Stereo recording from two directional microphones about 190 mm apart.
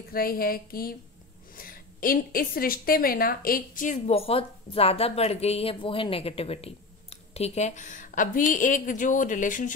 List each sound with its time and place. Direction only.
0.1 s a woman's voice: 50° left (ahead or behind)